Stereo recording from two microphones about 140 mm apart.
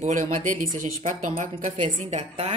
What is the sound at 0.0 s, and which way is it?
Speech, 60° right (ahead or behind).